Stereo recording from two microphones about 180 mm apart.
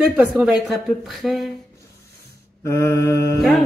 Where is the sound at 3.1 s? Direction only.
65° left (ahead or behind).